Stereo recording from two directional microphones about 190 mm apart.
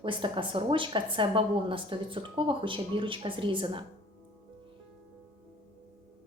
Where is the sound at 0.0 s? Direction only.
25° right (ahead or behind).